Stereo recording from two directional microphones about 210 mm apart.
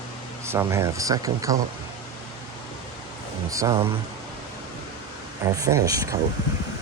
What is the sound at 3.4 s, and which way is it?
Speech, 15° right (ahead or behind).